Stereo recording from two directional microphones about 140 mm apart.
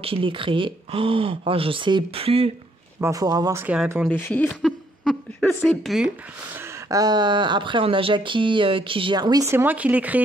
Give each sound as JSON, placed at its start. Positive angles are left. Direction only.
{"t": 0.0, "sound": "speech", "side_deg": -40}
{"t": 3.0, "sound": "speech", "side_deg": -25}
{"t": 3.6, "sound": "speech", "side_deg": -5}
{"t": 4.1, "sound": "speech", "side_deg": 10}
{"t": 4.6, "sound": "a sound", "side_deg": 0}
{"t": 5.4, "sound": "speech", "side_deg": 15}
{"t": 5.7, "sound": "speech", "side_deg": 0}
{"t": 6.9, "sound": "speech", "side_deg": -25}